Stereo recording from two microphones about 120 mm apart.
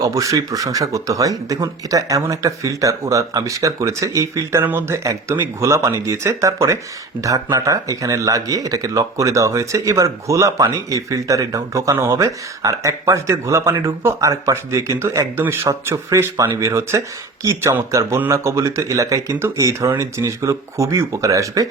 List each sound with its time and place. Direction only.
0.0 s speech: 25° right (ahead or behind)